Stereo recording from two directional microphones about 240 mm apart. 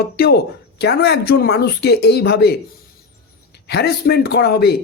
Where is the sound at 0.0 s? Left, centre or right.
Left.